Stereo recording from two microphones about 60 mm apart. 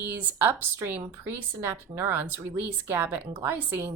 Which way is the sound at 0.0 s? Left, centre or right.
Right.